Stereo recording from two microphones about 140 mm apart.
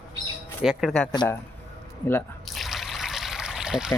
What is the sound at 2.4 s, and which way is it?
Trickle, centre (ahead or behind).